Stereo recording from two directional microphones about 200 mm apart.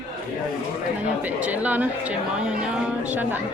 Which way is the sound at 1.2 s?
5° right (ahead or behind).